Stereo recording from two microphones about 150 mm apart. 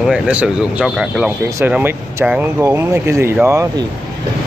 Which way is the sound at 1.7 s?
15° right (ahead or behind).